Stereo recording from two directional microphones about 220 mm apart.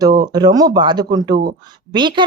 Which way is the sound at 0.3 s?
20° right (ahead or behind).